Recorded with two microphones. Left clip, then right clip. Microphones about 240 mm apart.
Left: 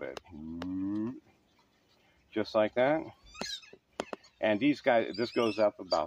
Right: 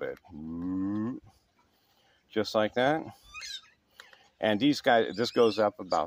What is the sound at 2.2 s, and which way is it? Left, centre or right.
Speech, right.